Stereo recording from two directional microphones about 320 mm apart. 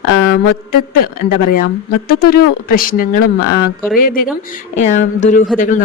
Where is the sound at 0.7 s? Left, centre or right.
Left.